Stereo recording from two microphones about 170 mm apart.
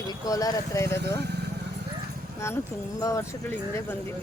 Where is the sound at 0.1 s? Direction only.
20° left (ahead or behind).